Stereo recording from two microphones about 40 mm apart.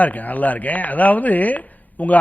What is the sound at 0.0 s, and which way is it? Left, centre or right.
Speech, left.